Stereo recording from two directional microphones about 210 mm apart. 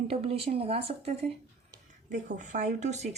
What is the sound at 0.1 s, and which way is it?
A woman's voice, 30° right (ahead or behind).